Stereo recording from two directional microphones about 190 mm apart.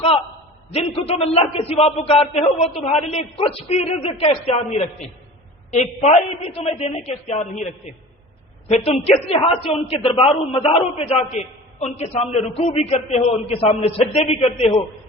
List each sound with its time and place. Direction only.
0.7 s a man's voice: 30° left (ahead or behind)